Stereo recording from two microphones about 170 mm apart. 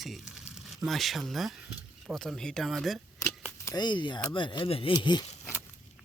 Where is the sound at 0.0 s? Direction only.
Centre (ahead or behind).